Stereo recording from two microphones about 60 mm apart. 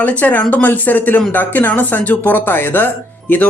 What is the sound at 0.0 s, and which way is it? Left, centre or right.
Speech, left.